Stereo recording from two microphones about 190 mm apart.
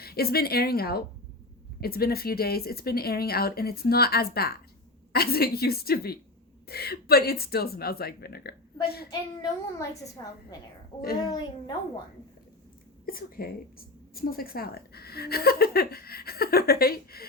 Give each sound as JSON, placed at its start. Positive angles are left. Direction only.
{"t": 0.0, "sound": "a woman's voice", "side_deg": 55}
{"t": 9.0, "sound": "a child's voice", "side_deg": 20}
{"t": 11.3, "sound": "a child's voice", "side_deg": 20}
{"t": 13.1, "sound": "a woman's voice", "side_deg": 50}